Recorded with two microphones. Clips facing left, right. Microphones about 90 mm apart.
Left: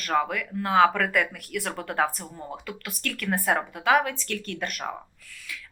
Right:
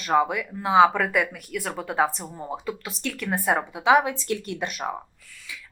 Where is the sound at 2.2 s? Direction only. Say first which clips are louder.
Right 3 dB; 20° right (ahead or behind).